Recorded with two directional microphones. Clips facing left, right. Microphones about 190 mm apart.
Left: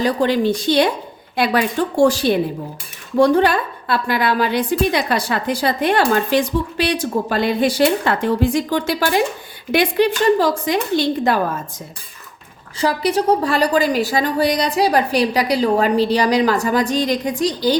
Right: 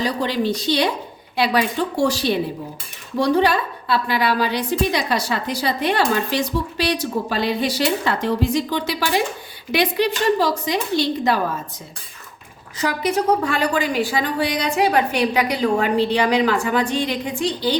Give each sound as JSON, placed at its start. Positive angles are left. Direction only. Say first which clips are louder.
{"t": 0.0, "sound": "a woman's voice", "louder": "left 5 dB", "side_deg": 50}
{"t": 2.0, "sound": "a woman's voice", "louder": "left 6 dB", "side_deg": 50}
{"t": 12.8, "sound": "a woman's voice", "louder": "left 3 dB", "side_deg": 35}